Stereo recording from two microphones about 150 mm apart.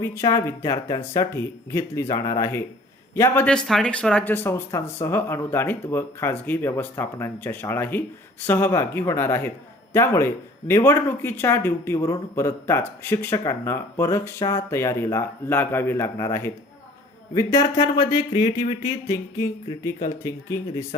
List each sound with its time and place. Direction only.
0.0 s speech: 20° left (ahead or behind)